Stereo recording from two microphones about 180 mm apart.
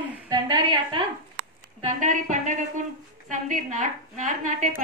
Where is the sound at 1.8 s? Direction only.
45° right (ahead or behind).